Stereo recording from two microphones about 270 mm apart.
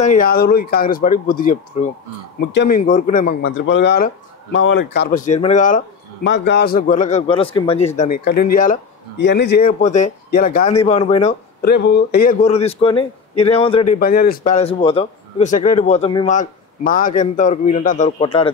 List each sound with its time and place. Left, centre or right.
0.0 s speech: left
2.8 s speech: left
3.4 s speech: left
6.2 s speech: left
11.7 s speech: left; by 13.9 s centre
13.9 s speech: left
16.3 s speech: left